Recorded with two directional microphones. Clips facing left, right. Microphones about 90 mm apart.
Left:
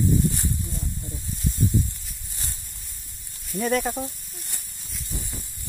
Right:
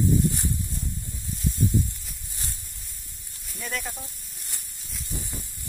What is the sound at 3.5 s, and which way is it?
Speech, 40° left (ahead or behind).